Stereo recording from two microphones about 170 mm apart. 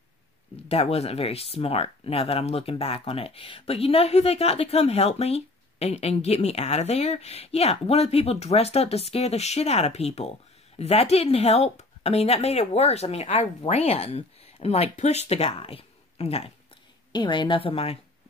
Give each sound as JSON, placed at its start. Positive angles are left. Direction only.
{"t": 0.7, "sound": "speech", "side_deg": 35}